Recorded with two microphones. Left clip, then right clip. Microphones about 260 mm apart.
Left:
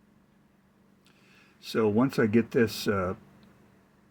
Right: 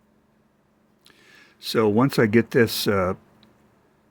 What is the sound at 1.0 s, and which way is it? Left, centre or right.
Speech, right.